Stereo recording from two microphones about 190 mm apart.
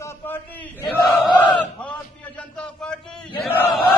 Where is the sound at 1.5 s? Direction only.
5° left (ahead or behind).